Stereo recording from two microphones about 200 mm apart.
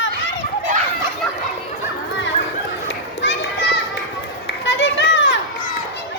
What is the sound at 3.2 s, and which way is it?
Children playing, 60° left (ahead or behind).